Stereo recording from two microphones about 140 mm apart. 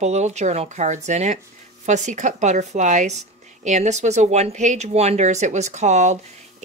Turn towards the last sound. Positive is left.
turn(degrees=-55)  # may be behind; listen again after turning